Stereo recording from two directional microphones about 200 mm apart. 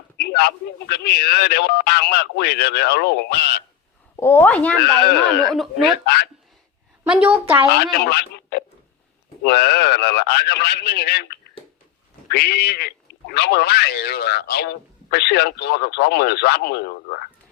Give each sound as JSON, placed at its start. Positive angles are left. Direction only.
{"t": 0.2, "sound": "speech", "side_deg": 55}
{"t": 4.2, "sound": "speech", "side_deg": 10}
{"t": 4.8, "sound": "speech", "side_deg": 55}
{"t": 7.0, "sound": "a woman's voice", "side_deg": -5}
{"t": 8.1, "sound": "telephone", "side_deg": 55}
{"t": 9.4, "sound": "speech", "side_deg": 55}